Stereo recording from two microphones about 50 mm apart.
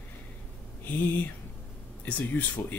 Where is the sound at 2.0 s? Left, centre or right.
Left.